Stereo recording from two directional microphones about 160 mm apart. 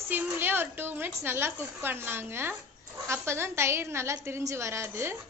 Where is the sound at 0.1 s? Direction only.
15° right (ahead or behind).